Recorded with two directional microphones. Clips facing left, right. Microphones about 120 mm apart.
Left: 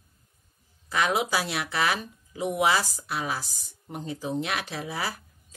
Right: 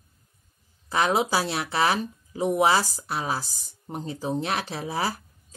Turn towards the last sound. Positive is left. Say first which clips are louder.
# right 4 dB
turn(degrees=-35)  # may be behind; listen again after turning